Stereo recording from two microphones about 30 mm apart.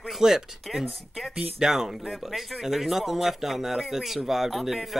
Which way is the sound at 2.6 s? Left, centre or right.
Centre.